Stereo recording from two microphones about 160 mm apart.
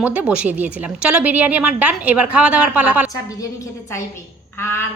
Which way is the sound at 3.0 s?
20° left (ahead or behind).